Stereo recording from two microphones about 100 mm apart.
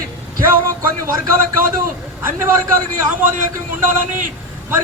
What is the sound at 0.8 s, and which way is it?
Speech, 30° right (ahead or behind).